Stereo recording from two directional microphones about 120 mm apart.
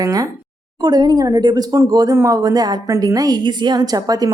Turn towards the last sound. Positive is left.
turn(degrees=-30)  # may be behind; listen again after turning